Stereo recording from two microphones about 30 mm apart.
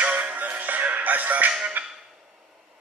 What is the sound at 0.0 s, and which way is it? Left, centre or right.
Music, right.